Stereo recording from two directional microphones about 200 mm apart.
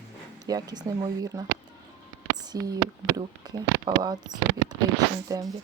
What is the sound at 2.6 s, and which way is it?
Speech, 20° right (ahead or behind).